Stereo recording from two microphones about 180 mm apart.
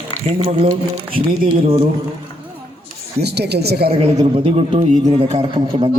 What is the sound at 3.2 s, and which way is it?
Speech, 65° right (ahead or behind).